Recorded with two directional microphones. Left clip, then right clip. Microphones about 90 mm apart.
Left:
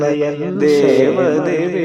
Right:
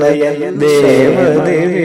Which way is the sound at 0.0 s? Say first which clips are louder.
Right 5 dB; 35° right (ahead or behind).